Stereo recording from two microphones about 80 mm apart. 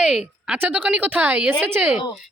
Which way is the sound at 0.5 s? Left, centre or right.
Centre.